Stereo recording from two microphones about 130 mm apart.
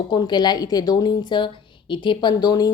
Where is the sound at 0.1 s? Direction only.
35° left (ahead or behind).